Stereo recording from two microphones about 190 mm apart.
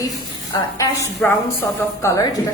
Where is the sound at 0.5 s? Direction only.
15° left (ahead or behind).